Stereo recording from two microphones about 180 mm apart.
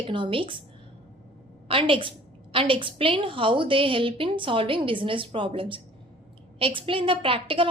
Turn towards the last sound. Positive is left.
turn(degrees=-30)  # may be behind; listen again after turning